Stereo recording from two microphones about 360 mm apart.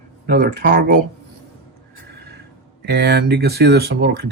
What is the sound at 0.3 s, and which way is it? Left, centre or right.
Speech, right.